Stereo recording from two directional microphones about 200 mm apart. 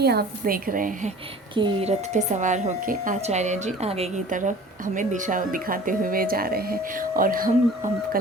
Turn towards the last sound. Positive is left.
turn(degrees=-40)  # may be behind; listen again after turning